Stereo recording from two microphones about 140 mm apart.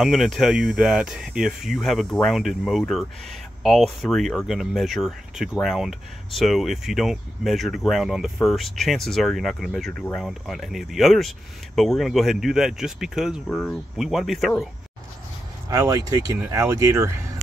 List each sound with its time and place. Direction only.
0.0 s speech: centre (ahead or behind)
15.7 s speech: 20° right (ahead or behind)